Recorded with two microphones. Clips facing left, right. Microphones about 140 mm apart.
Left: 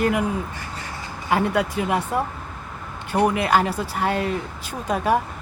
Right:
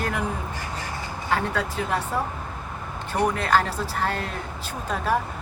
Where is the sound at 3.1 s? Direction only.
10° left (ahead or behind).